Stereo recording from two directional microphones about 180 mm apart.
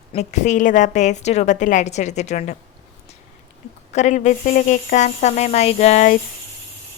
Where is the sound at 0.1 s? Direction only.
40° left (ahead or behind).